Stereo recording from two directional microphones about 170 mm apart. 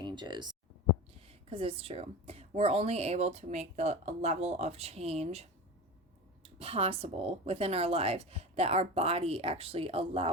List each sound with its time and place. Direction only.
0.0 s a woman's voice: 25° right (ahead or behind)